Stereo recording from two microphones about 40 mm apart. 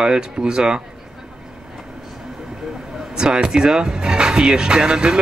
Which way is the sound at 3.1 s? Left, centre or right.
Centre.